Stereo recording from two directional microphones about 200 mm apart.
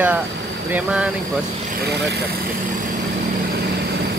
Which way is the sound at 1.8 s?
55° right (ahead or behind).